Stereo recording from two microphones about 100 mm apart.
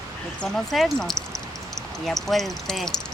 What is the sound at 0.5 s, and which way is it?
Speech, centre (ahead or behind).